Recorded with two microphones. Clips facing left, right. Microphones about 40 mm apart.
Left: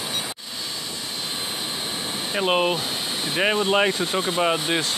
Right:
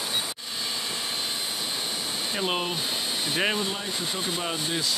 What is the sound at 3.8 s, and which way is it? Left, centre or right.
Speech, left.